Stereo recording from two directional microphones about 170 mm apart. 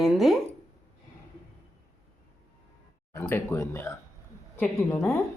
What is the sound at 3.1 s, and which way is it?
Speech, 15° left (ahead or behind).